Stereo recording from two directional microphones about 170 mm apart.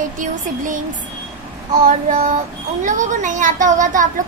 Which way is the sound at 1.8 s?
45° right (ahead or behind).